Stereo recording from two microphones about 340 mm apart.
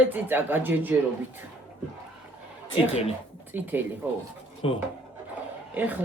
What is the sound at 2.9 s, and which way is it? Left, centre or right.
Speech, centre.